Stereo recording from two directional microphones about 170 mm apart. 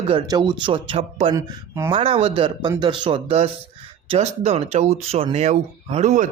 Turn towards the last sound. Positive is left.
turn(degrees=-45)  # may be behind; listen again after turning